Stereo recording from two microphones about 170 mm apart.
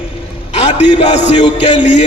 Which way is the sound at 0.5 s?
40° left (ahead or behind).